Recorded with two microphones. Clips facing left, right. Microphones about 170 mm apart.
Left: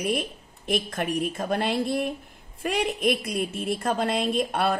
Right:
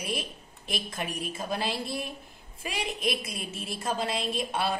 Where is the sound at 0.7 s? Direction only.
60° left (ahead or behind).